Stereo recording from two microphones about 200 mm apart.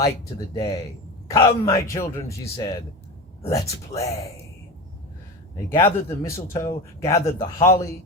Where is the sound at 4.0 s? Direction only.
15° left (ahead or behind).